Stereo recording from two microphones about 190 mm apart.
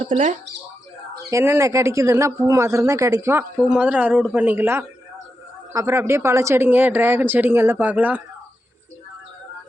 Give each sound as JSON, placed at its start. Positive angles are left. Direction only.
{"t": 0.0, "sound": "speech", "side_deg": -35}
{"t": 1.3, "sound": "speech", "side_deg": -15}